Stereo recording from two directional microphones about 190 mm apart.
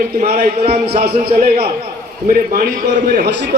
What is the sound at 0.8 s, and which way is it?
A man's voice, 55° right (ahead or behind).